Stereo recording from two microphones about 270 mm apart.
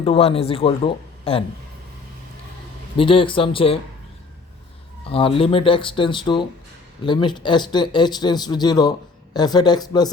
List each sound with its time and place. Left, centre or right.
0.0 s speech: left
3.0 s speech: centre
5.0 s speech: centre